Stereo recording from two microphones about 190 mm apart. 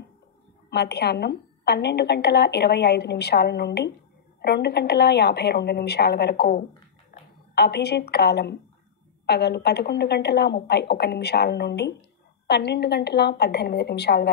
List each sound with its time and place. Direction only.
0.7 s a woman's voice: 60° left (ahead or behind)